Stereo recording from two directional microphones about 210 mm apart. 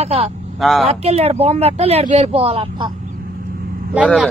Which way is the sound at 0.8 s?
30° right (ahead or behind).